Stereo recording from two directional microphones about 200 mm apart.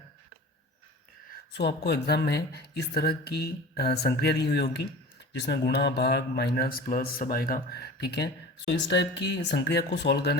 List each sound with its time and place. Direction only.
1.5 s speech: 55° left (ahead or behind)